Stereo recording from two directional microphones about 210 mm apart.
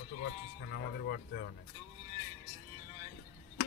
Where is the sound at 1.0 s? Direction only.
50° left (ahead or behind).